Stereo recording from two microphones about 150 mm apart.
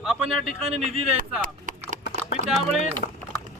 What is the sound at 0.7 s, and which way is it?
Speech, 45° right (ahead or behind).